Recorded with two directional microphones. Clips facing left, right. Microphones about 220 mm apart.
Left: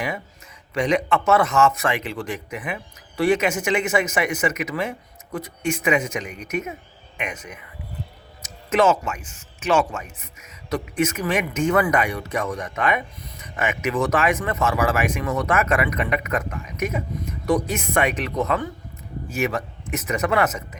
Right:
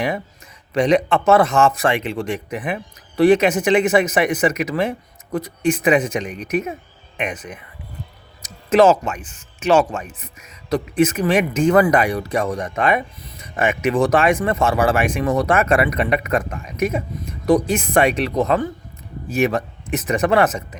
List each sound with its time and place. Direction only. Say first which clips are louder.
0.7 s speech: right 5 dB; 35° right (ahead or behind)